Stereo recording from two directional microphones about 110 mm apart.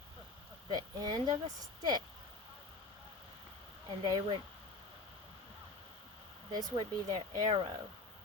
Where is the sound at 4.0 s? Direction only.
50° right (ahead or behind).